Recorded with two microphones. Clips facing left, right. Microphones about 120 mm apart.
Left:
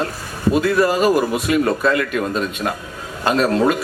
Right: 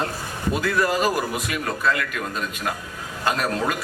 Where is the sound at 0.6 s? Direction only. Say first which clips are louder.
Left 5 dB; 25° left (ahead or behind).